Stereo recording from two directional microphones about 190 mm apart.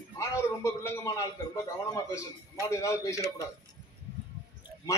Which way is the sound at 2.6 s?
15° left (ahead or behind).